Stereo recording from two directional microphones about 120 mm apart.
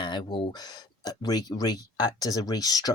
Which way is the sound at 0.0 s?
40° left (ahead or behind).